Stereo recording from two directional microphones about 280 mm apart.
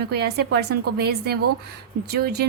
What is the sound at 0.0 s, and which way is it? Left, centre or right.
A woman's voice, right.